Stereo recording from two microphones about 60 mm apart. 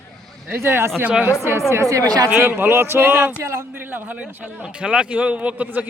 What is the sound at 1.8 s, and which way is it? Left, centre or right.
Speech, right.